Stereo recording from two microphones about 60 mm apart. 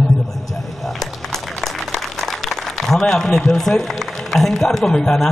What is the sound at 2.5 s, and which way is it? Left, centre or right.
A man's voice, centre.